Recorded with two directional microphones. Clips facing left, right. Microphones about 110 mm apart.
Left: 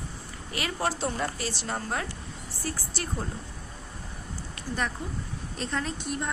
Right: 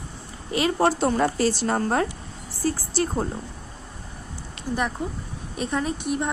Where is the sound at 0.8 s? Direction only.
70° right (ahead or behind).